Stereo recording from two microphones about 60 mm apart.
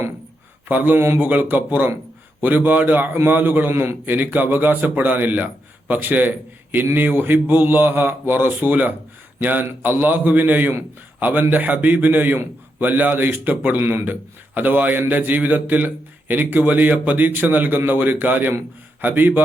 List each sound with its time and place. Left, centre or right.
0.7 s a man's voice: right